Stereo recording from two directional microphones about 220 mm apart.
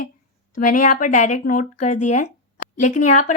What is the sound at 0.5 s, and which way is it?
Speech, 40° left (ahead or behind).